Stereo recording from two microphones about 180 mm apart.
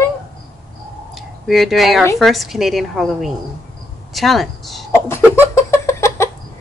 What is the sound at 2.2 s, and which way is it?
Speech, centre (ahead or behind).